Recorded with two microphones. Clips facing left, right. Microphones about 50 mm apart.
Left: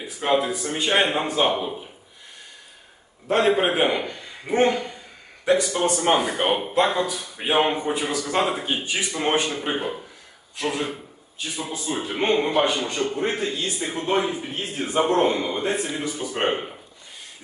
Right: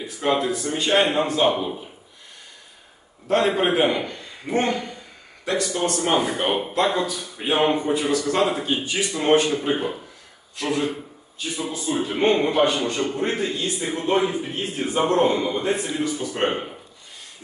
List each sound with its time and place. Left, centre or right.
0.0 s speech: centre
3.3 s a man's voice: centre